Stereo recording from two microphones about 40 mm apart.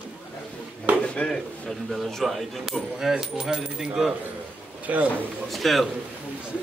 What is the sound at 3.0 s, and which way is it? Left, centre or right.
Speech, centre.